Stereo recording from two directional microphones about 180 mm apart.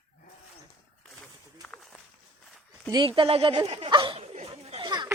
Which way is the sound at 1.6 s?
5° left (ahead or behind).